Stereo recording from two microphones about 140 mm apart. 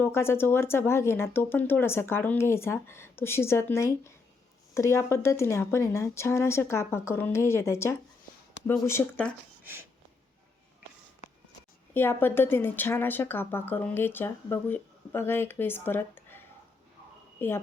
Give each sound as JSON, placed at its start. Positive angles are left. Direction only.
{"t": 0.0, "sound": "a woman's voice", "side_deg": 15}
{"t": 11.9, "sound": "a woman's voice", "side_deg": 15}
{"t": 17.4, "sound": "a woman's voice", "side_deg": 15}